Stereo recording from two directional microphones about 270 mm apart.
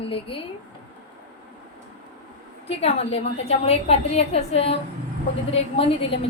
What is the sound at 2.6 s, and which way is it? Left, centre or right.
A woman's voice, left.